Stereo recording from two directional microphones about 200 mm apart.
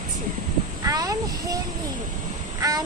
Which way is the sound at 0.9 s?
20° right (ahead or behind).